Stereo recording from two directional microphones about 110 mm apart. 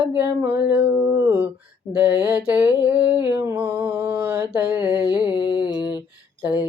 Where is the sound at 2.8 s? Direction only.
15° right (ahead or behind).